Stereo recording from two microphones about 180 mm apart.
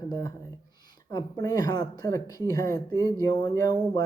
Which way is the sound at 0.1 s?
20° left (ahead or behind).